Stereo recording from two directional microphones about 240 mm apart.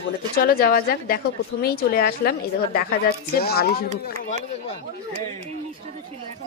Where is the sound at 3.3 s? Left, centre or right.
Left.